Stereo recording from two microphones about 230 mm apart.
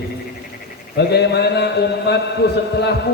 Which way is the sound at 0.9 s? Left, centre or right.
Left.